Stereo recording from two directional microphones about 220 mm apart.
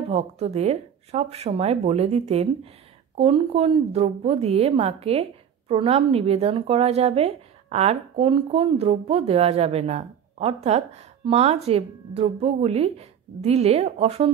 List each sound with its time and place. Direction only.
0.1 s a woman's voice: 30° right (ahead or behind)